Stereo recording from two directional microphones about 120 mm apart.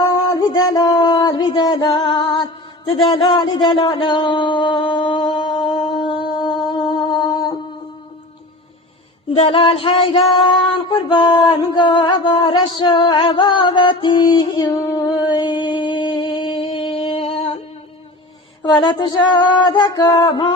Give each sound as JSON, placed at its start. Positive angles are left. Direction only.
{"t": 0.3, "sound": "music", "side_deg": 35}
{"t": 9.3, "sound": "a sound", "side_deg": 50}
{"t": 18.6, "sound": "speech", "side_deg": 40}